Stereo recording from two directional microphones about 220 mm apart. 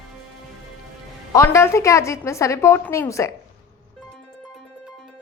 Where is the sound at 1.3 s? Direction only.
15° left (ahead or behind).